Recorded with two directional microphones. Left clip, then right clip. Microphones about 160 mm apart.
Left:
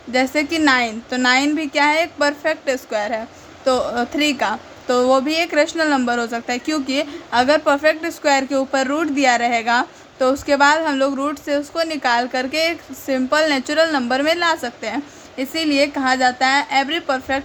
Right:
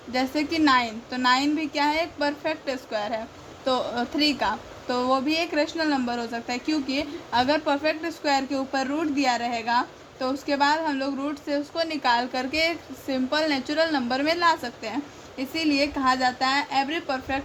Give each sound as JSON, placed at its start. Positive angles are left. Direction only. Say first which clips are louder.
{"t": 0.1, "sound": "speech", "louder": "left 8 dB", "side_deg": 30}